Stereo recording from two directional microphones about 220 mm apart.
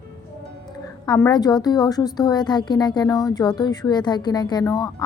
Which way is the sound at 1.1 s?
15° left (ahead or behind).